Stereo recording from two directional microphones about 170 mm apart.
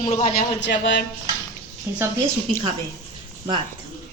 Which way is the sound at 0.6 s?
90° left.